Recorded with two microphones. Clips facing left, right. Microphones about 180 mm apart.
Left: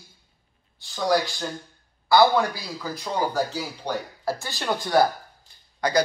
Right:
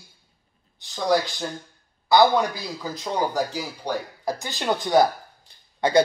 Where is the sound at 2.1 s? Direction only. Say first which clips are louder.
Right 1 dB; 20° right (ahead or behind).